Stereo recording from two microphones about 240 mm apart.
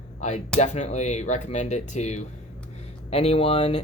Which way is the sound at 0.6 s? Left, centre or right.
Left.